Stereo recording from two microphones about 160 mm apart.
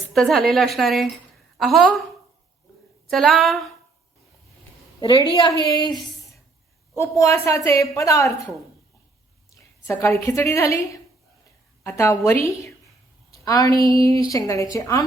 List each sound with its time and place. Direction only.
0.1 s a woman's voice: centre (ahead or behind)
3.1 s a woman's voice: centre (ahead or behind)
4.9 s a woman's voice: 30° left (ahead or behind)
9.5 s a woman's voice: 15° left (ahead or behind)
13.4 s a woman's voice: 20° left (ahead or behind)